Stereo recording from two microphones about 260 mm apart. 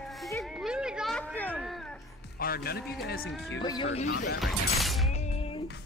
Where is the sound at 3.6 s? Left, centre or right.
Centre.